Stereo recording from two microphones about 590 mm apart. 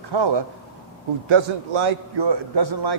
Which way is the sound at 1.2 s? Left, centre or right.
Right.